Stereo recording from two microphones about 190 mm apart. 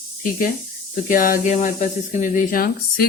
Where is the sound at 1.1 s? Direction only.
45° left (ahead or behind).